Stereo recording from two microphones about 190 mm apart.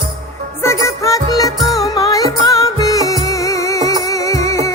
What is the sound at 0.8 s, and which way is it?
Music, 15° left (ahead or behind).